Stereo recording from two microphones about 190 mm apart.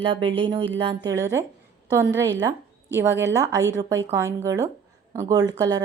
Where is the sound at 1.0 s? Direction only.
15° right (ahead or behind).